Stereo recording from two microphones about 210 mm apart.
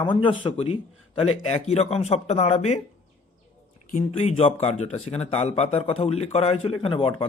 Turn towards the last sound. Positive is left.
turn(degrees=25)  # may be behind; listen again after turning